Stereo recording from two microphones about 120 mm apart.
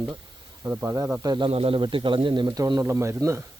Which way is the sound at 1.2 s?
35° right (ahead or behind).